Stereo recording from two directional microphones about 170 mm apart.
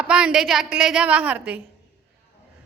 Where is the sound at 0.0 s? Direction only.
5° right (ahead or behind).